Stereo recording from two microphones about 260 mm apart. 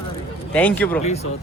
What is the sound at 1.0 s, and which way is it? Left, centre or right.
Speech, left.